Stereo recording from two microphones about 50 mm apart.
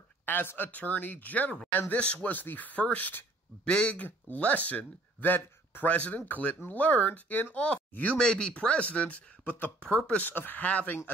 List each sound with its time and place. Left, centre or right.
0.2 s speech: left
0.7 s speech: left
2.3 s speech: left
7.5 s speech: left
8.2 s speech: centre; by 9.7 s left
9.8 s speech: left
10.3 s speech: left